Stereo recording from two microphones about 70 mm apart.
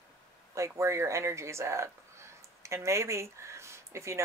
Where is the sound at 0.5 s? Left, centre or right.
Right.